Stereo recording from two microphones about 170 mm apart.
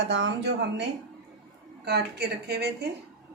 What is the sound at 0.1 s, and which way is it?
Speech, 90° right.